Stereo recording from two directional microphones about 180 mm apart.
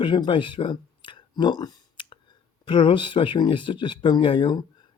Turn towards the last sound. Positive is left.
turn(degrees=25)  # may be behind; listen again after turning